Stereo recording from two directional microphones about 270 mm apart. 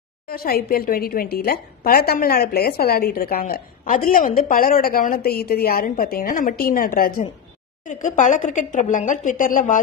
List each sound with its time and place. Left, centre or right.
0.3 s a woman's voice: left